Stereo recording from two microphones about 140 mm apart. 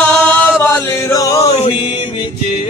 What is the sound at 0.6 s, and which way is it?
Chant, 20° left (ahead or behind).